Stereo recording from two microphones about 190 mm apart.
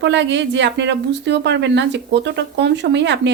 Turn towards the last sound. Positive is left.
turn(degrees=-65)  # may be behind; listen again after turning